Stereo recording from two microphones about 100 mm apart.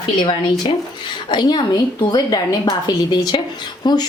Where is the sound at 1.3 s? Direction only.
50° left (ahead or behind).